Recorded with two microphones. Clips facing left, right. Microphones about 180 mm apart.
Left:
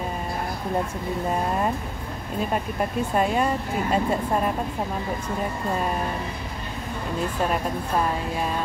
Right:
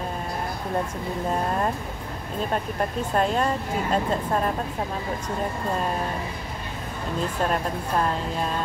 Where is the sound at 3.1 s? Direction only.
10° left (ahead or behind).